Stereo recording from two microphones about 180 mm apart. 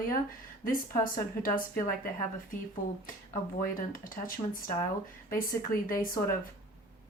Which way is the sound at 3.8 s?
50° left (ahead or behind).